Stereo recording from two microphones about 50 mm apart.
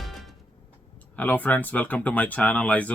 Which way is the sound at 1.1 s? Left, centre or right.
Left.